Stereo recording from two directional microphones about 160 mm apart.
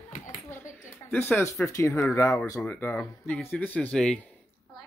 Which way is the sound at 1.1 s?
10° left (ahead or behind).